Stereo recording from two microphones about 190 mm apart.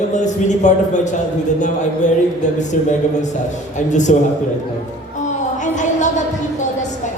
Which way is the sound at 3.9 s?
40° left (ahead or behind).